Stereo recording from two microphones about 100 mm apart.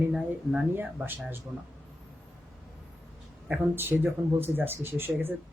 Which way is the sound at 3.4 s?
20° right (ahead or behind).